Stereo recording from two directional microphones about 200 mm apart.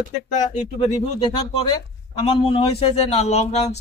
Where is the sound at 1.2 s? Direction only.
25° left (ahead or behind).